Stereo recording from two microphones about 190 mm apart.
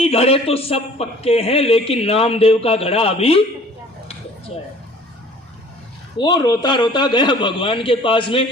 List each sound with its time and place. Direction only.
0.0 s a man's voice: 30° left (ahead or behind)
6.1 s a man's voice: 20° left (ahead or behind)